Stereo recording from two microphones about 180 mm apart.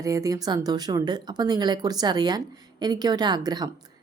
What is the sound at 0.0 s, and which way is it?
Speech, 20° right (ahead or behind).